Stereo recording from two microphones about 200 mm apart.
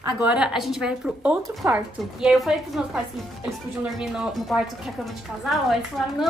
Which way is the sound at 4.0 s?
5° right (ahead or behind).